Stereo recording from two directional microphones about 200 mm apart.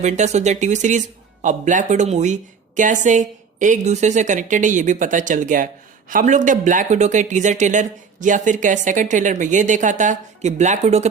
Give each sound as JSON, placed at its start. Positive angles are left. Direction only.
{"t": 0.0, "sound": "speech", "side_deg": -35}